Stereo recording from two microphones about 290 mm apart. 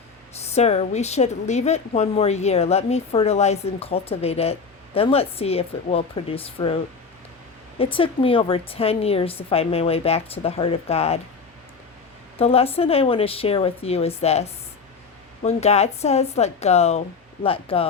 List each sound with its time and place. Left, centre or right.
0.5 s a woman's voice: left
7.8 s a woman's voice: centre
12.4 s a woman's voice: centre